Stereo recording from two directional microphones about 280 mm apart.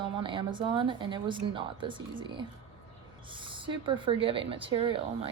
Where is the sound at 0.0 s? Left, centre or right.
Centre.